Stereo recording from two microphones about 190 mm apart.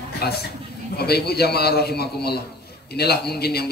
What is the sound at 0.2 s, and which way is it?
A man's voice, 55° left (ahead or behind).